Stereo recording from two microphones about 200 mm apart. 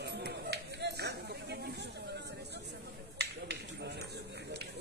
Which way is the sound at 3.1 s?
60° right (ahead or behind).